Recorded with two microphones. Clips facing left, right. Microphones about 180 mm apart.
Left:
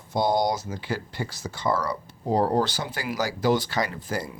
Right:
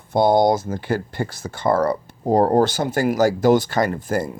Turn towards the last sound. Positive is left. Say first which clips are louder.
# right 8 dB
turn(degrees=-50)  # may be behind; listen again after turning